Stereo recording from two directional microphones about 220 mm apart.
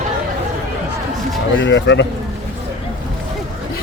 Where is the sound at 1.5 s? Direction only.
60° left (ahead or behind).